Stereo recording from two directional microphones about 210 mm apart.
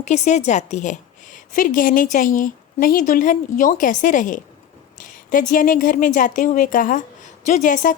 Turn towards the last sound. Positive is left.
turn(degrees=35)  # may be behind; listen again after turning